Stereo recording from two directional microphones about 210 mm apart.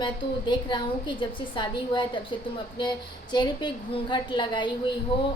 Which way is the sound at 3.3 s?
20° left (ahead or behind).